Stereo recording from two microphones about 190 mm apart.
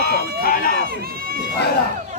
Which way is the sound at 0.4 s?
50° left (ahead or behind).